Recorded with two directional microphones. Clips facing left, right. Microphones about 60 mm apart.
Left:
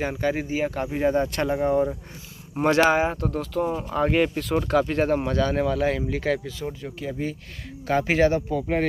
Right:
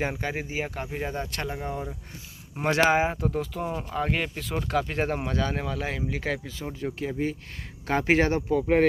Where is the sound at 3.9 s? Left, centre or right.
Centre.